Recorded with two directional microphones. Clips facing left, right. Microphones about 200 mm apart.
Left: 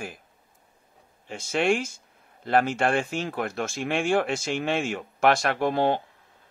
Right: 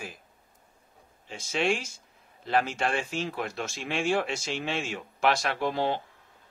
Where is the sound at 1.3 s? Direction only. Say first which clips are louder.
Left 4 dB; 55° left (ahead or behind).